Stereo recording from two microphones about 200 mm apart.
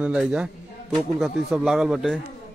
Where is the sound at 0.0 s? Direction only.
5° right (ahead or behind).